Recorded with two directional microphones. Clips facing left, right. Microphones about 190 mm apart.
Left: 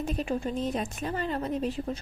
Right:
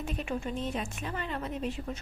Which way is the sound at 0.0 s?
35° left (ahead or behind).